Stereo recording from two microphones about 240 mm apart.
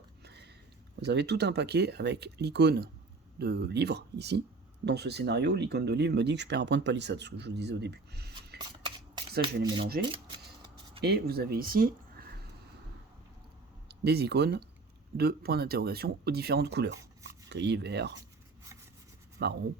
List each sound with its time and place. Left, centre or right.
0.3 s a sound: right
1.0 s speech: right
8.5 s shuffling cards: centre
9.6 s speech: right
10.0 s a sound: centre
11.0 s speech: right
13.8 s speech: right
19.4 s speech: right